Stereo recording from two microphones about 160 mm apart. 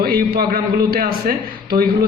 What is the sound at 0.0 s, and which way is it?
A man's voice, 70° right (ahead or behind).